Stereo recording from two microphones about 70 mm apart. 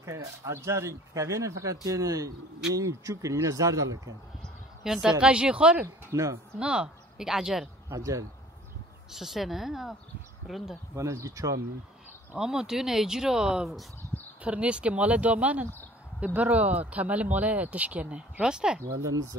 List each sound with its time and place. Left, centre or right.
0.0 s speech: right
4.8 s a woman's voice: centre
6.1 s speech: right
6.6 s speech: centre
7.9 s speech: right
9.1 s speech: centre
11.0 s speech: right
12.4 s speech: centre
19.0 s speech: right